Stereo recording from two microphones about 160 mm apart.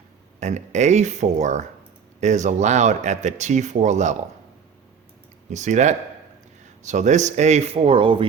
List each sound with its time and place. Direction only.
0.3 s speech: 45° right (ahead or behind)
5.5 s speech: 50° right (ahead or behind); by 8.3 s 30° right (ahead or behind)